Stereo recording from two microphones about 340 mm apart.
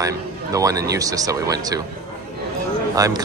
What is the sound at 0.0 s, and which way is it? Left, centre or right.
Speech, centre.